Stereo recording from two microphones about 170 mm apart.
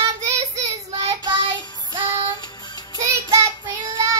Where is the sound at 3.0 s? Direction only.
20° right (ahead or behind).